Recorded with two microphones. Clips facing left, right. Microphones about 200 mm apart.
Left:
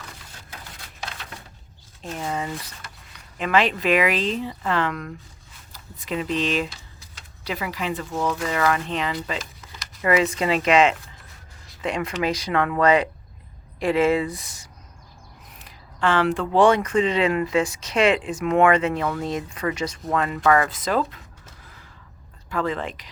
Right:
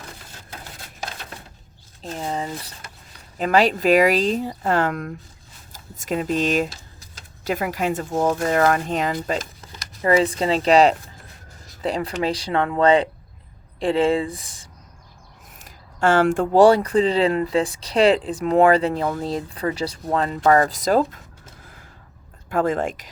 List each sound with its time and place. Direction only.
2.0 s speech: 30° right (ahead or behind)
10.1 s speech: 30° right (ahead or behind)
15.5 s speech: 45° right (ahead or behind)
22.4 s speech: 50° right (ahead or behind)